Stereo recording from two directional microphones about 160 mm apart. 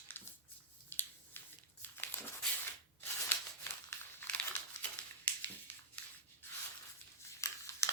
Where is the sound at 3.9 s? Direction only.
10° left (ahead or behind).